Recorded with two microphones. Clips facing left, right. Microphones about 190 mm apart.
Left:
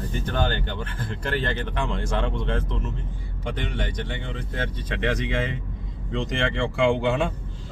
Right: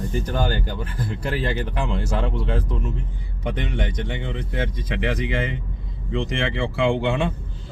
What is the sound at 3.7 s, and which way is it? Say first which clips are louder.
Speech: right 3 dB; 20° right (ahead or behind).